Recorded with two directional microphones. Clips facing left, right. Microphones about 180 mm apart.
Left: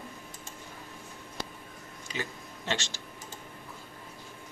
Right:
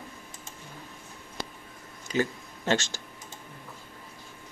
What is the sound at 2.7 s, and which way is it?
Speech, 45° right (ahead or behind).